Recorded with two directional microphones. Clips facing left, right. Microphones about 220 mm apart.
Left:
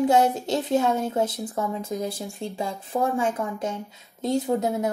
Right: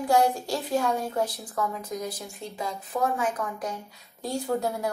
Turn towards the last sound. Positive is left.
turn(degrees=20)  # may be behind; listen again after turning